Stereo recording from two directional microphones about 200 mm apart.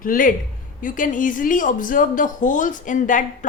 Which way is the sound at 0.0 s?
45° left (ahead or behind).